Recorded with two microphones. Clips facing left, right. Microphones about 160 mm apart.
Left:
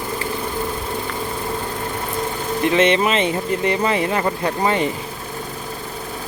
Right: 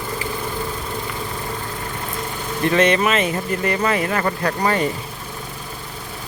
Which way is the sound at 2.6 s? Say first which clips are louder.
Even; 20° left (ahead or behind).